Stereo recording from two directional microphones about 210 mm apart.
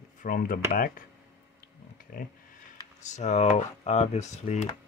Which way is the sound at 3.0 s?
35° left (ahead or behind).